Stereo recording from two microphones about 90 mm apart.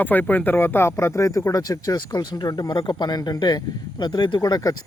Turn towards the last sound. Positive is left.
turn(degrees=40)  # may be behind; listen again after turning